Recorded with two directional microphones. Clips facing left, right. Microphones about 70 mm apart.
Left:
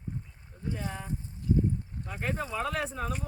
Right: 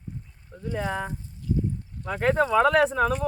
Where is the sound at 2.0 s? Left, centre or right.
Right.